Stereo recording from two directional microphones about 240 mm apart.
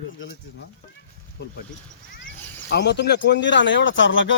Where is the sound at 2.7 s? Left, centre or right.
Left.